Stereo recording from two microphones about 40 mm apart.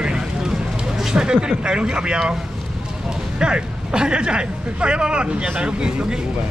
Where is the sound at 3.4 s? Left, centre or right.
Right.